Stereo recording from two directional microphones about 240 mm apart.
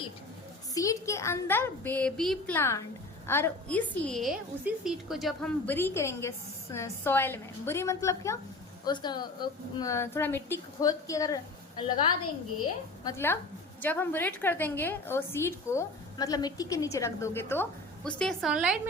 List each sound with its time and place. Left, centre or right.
0.7 s a woman's voice: centre
13.1 s a woman's voice: centre